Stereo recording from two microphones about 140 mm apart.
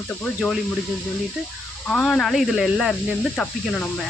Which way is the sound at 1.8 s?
10° left (ahead or behind).